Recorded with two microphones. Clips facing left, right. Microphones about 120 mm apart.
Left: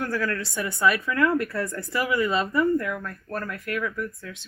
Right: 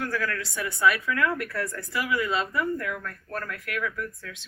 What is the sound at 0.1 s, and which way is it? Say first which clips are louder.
Speech: left 3 dB; 25° left (ahead or behind).